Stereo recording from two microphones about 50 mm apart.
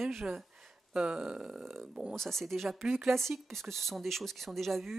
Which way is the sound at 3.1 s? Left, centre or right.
Centre.